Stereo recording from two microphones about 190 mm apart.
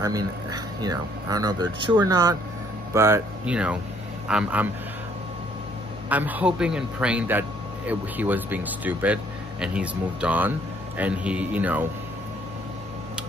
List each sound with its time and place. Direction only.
0.0 s a man's voice: 20° right (ahead or behind)
6.0 s a man's voice: 10° right (ahead or behind)